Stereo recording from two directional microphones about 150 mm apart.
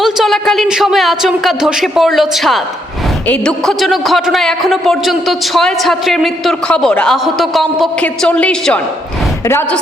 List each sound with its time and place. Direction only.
0.0 s a man's voice: centre (ahead or behind)